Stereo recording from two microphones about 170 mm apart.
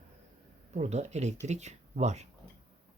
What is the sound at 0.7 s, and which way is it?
Speech, 40° right (ahead or behind).